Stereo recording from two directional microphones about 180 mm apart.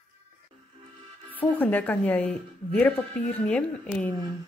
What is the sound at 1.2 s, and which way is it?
A woman's voice, 10° left (ahead or behind).